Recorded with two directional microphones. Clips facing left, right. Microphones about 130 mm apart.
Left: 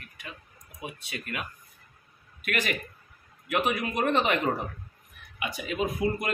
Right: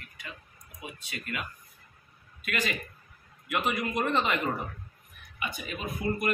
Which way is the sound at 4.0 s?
70° left (ahead or behind).